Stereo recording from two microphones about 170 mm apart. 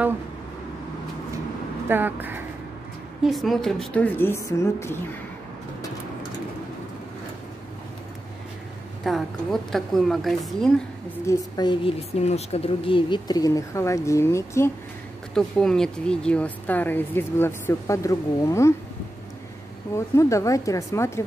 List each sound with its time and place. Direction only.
1.9 s speech: 10° right (ahead or behind)
3.3 s speech: centre (ahead or behind); by 4.9 s 15° left (ahead or behind)
9.0 s a woman's voice: centre (ahead or behind)
11.2 s speech: 25° left (ahead or behind)
12.1 s speech: 40° left (ahead or behind); by 14.7 s 15° left (ahead or behind)
15.3 s speech: 5° left (ahead or behind)
20.2 s speech: 20° left (ahead or behind)